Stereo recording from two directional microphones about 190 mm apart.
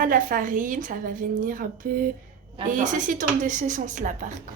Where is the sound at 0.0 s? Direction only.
45° right (ahead or behind).